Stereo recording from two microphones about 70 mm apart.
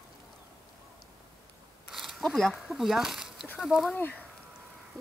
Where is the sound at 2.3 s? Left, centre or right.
Centre.